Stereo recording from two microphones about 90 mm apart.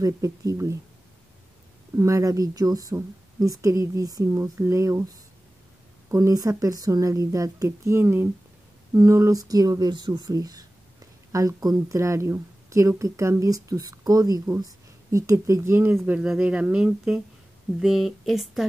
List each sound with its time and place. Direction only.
0.0 s speech: 40° right (ahead or behind)
2.0 s speech: 35° right (ahead or behind)
6.1 s speech: 40° right (ahead or behind)
15.0 s speech: 30° right (ahead or behind)
16.2 s speech: 10° right (ahead or behind)